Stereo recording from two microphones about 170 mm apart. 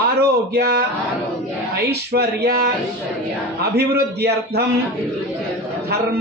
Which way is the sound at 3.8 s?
70° right (ahead or behind).